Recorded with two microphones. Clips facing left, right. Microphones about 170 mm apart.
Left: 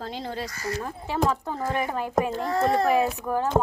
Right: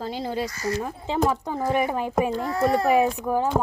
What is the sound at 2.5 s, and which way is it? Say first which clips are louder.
Speech: right 1 dB; 20° left (ahead or behind).